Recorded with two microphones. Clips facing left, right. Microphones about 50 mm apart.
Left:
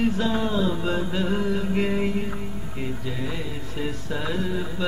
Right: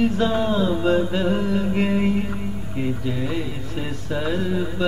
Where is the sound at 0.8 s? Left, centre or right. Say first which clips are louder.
Right 5 dB; centre.